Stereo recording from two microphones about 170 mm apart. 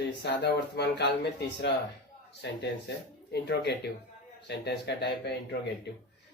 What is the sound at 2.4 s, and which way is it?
Speech, 90° left.